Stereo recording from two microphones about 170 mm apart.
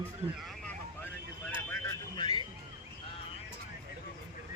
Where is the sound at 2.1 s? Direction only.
25° left (ahead or behind).